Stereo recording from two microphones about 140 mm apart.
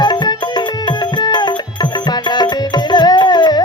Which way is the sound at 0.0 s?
30° left (ahead or behind).